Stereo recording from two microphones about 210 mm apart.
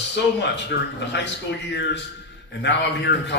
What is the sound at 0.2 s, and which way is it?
A man's voice, 55° left (ahead or behind).